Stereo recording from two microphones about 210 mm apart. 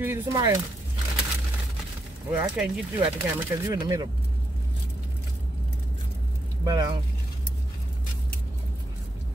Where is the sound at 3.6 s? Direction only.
15° right (ahead or behind).